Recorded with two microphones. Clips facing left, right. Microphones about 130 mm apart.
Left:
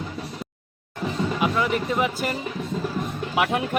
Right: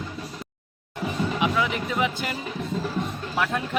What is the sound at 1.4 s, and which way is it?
Speech, centre (ahead or behind).